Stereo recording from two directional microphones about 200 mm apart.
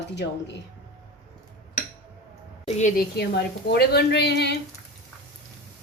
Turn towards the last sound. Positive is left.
turn(degrees=55)  # may be behind; listen again after turning